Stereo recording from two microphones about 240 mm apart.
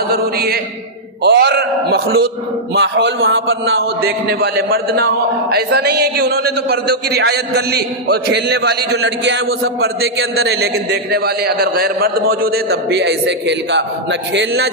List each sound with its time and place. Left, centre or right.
0.1 s a man's voice: right